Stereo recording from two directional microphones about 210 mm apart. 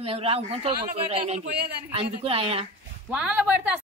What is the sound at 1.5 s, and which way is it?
Speech, 50° right (ahead or behind).